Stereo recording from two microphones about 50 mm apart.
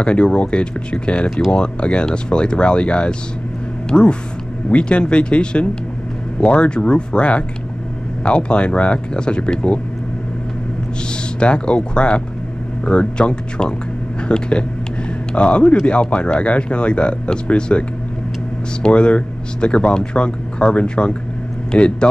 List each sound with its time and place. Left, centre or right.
0.0 s speech: left
11.3 s speech: centre
18.9 s speech: left